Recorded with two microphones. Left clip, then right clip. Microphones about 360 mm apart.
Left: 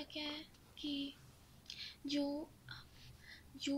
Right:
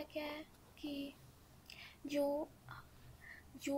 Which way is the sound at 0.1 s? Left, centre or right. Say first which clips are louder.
Even; centre.